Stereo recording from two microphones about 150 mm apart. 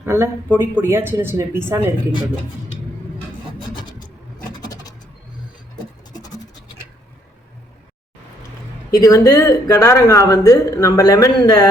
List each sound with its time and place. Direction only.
0.0 s speech: 15° right (ahead or behind)
8.9 s speech: 25° left (ahead or behind)